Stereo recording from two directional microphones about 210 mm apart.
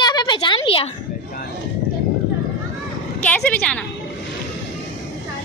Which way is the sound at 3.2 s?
5° left (ahead or behind).